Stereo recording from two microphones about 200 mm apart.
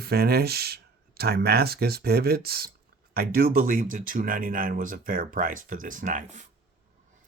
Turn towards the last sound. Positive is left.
turn(degrees=-40)  # may be behind; listen again after turning